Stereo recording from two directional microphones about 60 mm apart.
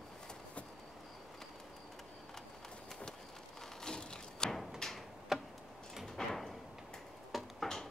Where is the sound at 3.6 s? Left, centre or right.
Centre.